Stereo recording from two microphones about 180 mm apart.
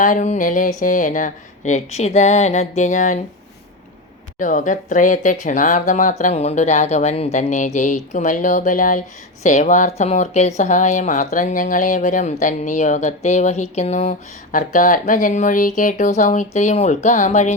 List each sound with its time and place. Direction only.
0.0 s speech: 45° left (ahead or behind)
4.4 s speech: 45° left (ahead or behind)